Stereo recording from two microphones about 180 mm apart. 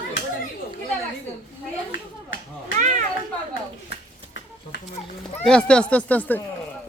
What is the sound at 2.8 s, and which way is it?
Speech, 45° right (ahead or behind).